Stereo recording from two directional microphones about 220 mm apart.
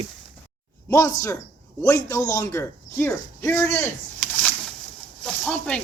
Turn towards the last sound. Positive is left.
turn(degrees=5)  # may be behind; listen again after turning